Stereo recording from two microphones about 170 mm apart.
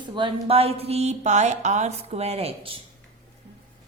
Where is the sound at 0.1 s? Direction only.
30° right (ahead or behind).